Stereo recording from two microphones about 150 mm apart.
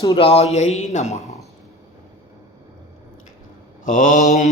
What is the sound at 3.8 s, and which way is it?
Speech, 60° left (ahead or behind).